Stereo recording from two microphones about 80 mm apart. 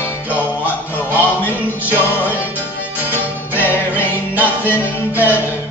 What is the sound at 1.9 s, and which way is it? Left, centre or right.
Music, left.